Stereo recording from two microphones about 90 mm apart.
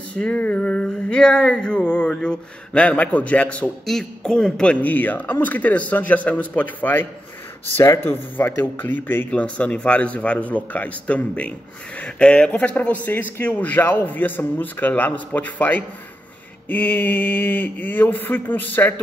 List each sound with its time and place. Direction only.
0.1 s a man's voice: 15° left (ahead or behind)